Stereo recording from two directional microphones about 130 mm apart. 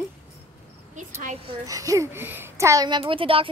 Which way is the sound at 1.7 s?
25° right (ahead or behind).